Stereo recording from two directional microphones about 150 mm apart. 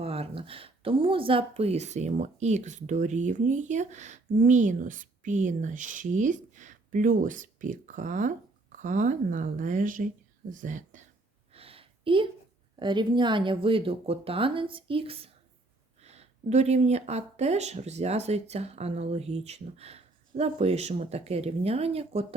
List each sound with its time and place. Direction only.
0.0 s speech: 40° right (ahead or behind); by 11.0 s 60° right (ahead or behind)
11.5 s a sound: 40° right (ahead or behind)
12.8 s speech: 30° right (ahead or behind)